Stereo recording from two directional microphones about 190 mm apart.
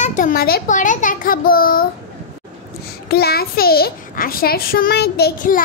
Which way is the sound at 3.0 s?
55° left (ahead or behind).